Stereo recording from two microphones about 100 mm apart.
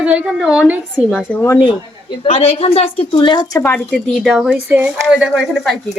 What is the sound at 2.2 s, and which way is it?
Speech, 90° left.